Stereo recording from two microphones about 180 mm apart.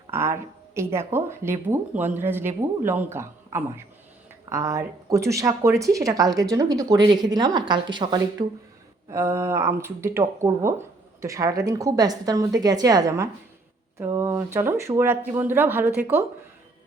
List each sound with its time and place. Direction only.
0.1 s speech: 15° right (ahead or behind)